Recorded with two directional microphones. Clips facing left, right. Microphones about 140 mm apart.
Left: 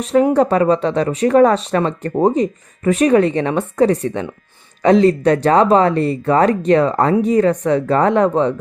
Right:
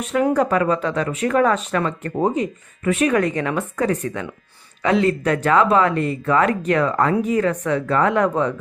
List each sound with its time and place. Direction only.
0.0 s speech: 35° left (ahead or behind)